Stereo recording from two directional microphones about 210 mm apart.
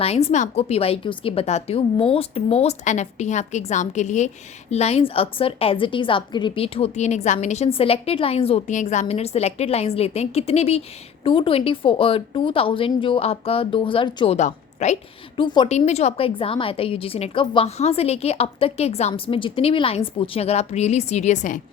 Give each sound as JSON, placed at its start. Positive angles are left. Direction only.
{"t": 0.0, "sound": "a woman's voice", "side_deg": 30}
{"t": 15.4, "sound": "a woman's voice", "side_deg": 20}